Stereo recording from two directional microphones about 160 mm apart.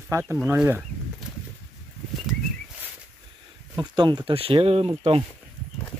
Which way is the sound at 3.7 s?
25° right (ahead or behind).